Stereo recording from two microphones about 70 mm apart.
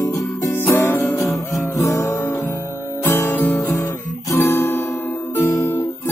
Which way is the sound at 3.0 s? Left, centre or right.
Left.